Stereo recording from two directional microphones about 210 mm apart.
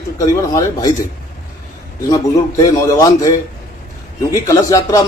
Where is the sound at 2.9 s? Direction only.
15° left (ahead or behind).